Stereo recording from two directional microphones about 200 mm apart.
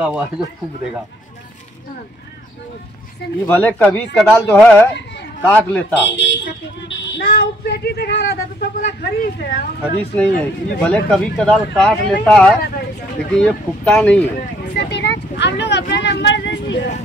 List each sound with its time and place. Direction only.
0.0 s speech: 5° right (ahead or behind)
3.4 s speech: 10° left (ahead or behind)
6.1 s speech: 65° left (ahead or behind); by 9.7 s 45° left (ahead or behind)
10.1 s speech: 5° left (ahead or behind)
14.7 s vehicle: 55° left (ahead or behind)